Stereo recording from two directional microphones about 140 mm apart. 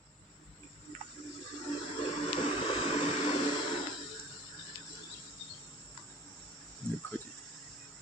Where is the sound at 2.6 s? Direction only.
40° left (ahead or behind).